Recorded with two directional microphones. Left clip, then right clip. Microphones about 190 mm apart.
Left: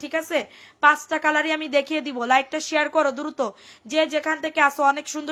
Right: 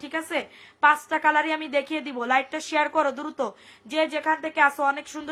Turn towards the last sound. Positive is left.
turn(degrees=30)  # may be behind; listen again after turning